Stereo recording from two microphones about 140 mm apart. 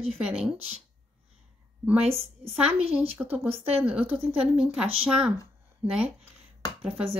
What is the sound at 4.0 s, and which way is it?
Speech, 40° right (ahead or behind).